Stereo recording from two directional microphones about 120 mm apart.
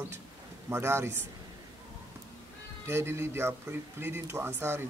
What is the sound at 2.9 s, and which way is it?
Speech, 20° right (ahead or behind).